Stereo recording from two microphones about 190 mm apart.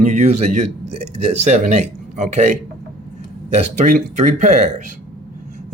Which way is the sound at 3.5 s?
40° right (ahead or behind).